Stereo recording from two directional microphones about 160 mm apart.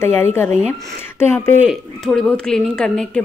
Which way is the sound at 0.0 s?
15° left (ahead or behind).